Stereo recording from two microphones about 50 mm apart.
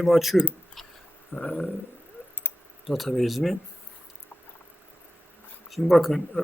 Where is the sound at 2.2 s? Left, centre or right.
Right.